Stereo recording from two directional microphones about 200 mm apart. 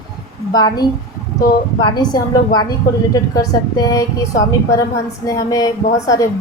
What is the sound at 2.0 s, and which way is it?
A woman's voice, 20° left (ahead or behind).